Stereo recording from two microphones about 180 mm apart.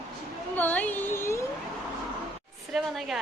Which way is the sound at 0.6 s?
10° left (ahead or behind).